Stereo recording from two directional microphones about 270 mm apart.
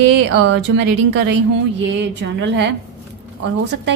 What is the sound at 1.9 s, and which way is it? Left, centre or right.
Speech, right.